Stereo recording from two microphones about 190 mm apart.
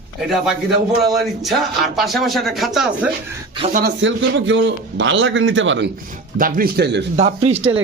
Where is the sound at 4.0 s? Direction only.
75° right (ahead or behind).